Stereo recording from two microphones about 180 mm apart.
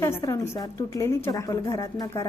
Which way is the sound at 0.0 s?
15° left (ahead or behind).